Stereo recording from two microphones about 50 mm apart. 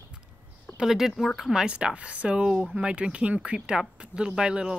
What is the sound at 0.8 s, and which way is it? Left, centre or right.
Speech, centre.